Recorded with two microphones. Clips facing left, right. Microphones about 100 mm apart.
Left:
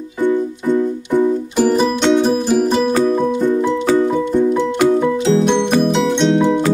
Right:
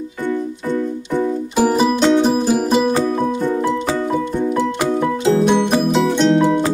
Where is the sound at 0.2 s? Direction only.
15° left (ahead or behind).